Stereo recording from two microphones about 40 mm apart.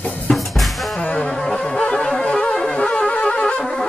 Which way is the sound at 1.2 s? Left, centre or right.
Centre.